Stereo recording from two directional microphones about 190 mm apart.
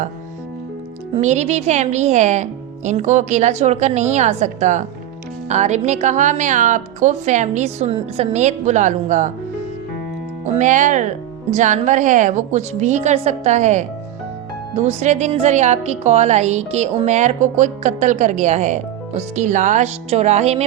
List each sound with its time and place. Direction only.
1.1 s a woman's voice: 35° right (ahead or behind)
10.4 s a woman's voice: 40° right (ahead or behind)